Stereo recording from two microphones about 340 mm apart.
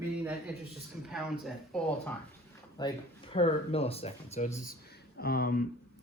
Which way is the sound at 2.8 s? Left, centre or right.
Centre.